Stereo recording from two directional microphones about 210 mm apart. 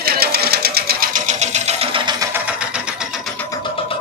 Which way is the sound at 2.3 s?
5° right (ahead or behind).